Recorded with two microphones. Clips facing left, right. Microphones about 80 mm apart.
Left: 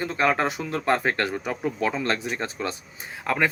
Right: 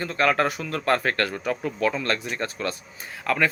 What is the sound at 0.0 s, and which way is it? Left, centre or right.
Speech, centre.